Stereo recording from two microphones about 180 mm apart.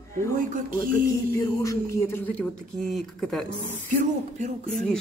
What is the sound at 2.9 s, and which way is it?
Speech, 5° left (ahead or behind).